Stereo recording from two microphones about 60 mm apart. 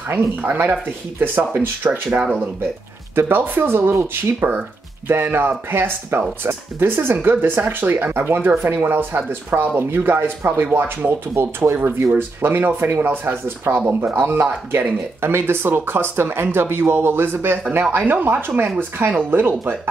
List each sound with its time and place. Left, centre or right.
0.1 s speech: right
3.2 s speech: right